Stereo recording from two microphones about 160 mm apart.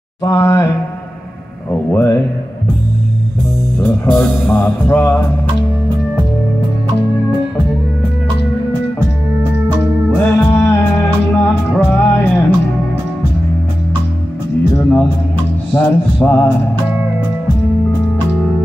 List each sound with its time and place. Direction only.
0.2 s speech: 20° left (ahead or behind)
1.9 s music: 15° left (ahead or behind)
3.8 s music: 15° left (ahead or behind)
10.1 s music: 15° left (ahead or behind)
14.8 s music: 10° left (ahead or behind)
15.7 s a sound: 10° left (ahead or behind)